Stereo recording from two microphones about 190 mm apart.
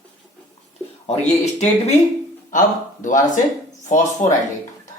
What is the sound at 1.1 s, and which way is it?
Speech, 35° left (ahead or behind).